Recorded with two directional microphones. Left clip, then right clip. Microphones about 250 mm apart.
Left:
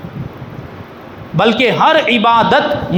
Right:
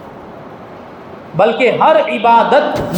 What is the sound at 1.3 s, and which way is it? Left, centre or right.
Speech, left.